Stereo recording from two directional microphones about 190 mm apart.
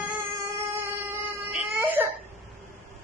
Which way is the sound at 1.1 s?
10° right (ahead or behind).